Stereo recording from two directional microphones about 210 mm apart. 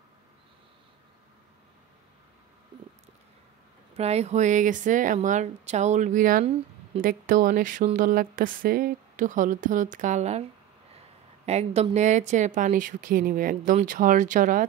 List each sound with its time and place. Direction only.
3.9 s speech: 30° right (ahead or behind)
11.4 s speech: 30° right (ahead or behind)